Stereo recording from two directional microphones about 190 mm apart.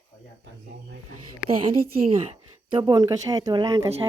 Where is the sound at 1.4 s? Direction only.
5° right (ahead or behind).